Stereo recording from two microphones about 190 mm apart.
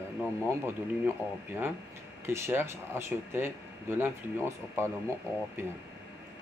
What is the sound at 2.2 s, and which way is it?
Speech, 15° right (ahead or behind).